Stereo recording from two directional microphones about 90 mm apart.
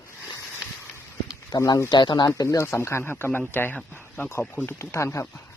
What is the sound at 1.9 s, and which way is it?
Speech, 55° left (ahead or behind).